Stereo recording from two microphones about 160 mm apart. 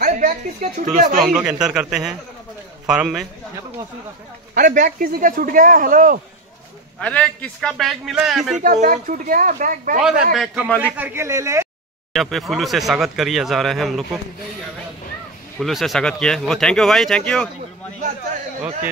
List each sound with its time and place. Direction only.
0.0 s speech: 45° right (ahead or behind)
1.2 s speech: 5° right (ahead or behind)
4.6 s speech: 55° right (ahead or behind)
7.0 s speech: 10° left (ahead or behind)
8.5 s speech: 55° right (ahead or behind)
10.3 s a man's voice: centre (ahead or behind)
12.1 s speech: centre (ahead or behind)
15.6 s speech: centre (ahead or behind)